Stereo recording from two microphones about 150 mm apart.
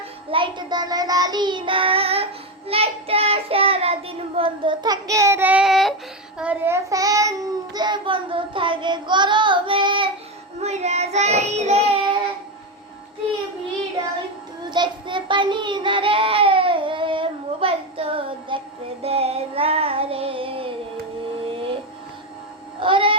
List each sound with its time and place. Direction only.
0.3 s child singing: 35° right (ahead or behind); by 6.7 s 10° right (ahead or behind)
6.9 s child singing: 20° right (ahead or behind)
10.6 s child singing: 45° right (ahead or behind)
14.7 s child singing: 30° right (ahead or behind)
21.5 s a sound: 35° right (ahead or behind)
22.8 s child singing: 35° right (ahead or behind)